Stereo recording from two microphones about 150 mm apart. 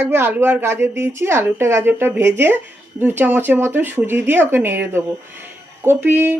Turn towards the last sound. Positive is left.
turn(degrees=-15)  # may be behind; listen again after turning